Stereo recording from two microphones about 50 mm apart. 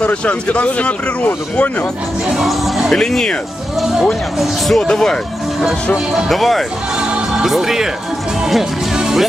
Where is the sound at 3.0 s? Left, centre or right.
Centre.